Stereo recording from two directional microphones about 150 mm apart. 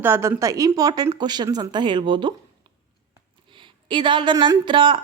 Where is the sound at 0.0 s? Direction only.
15° right (ahead or behind).